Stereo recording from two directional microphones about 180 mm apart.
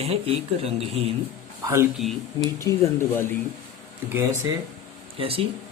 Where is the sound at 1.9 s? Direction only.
Centre (ahead or behind).